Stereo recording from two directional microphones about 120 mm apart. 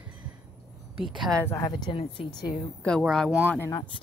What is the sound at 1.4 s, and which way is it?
Speech, 25° left (ahead or behind).